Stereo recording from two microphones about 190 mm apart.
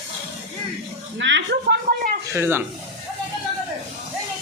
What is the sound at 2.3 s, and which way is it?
Speech, 10° right (ahead or behind).